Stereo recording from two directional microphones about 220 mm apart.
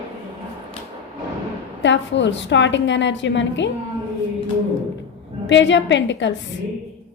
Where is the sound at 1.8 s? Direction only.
55° left (ahead or behind).